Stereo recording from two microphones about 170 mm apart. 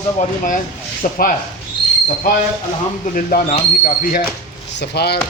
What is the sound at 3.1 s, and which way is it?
Speech, 55° left (ahead or behind).